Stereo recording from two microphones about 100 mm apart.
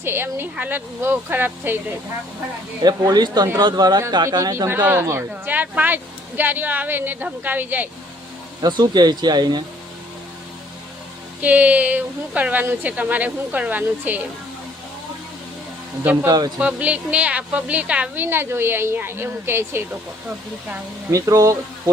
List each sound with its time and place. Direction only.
0.0 s speech: 25° right (ahead or behind)
2.8 s speech: 40° right (ahead or behind); by 7.9 s 20° right (ahead or behind)
8.6 s speech: 45° right (ahead or behind)
11.3 s a woman's voice: 15° right (ahead or behind)
16.2 s speech: 40° right (ahead or behind)
16.6 s a woman's voice: 15° right (ahead or behind)
21.1 s speech: 35° right (ahead or behind)